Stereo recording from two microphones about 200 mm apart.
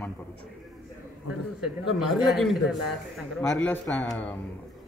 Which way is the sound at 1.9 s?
Centre (ahead or behind).